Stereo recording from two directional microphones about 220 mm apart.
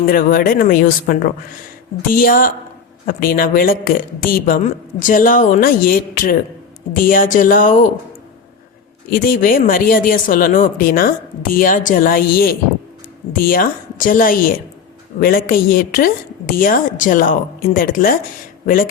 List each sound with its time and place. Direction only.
0.0 s speech: 40° left (ahead or behind)
9.0 s speech: 40° left (ahead or behind)